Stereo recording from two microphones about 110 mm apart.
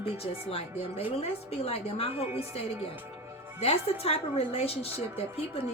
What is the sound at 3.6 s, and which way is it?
A woman's voice, 70° left (ahead or behind).